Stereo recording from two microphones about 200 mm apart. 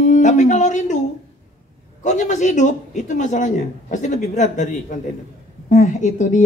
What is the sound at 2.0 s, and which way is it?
Speech, 35° left (ahead or behind).